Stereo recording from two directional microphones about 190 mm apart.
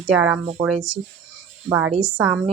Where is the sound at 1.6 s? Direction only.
15° right (ahead or behind).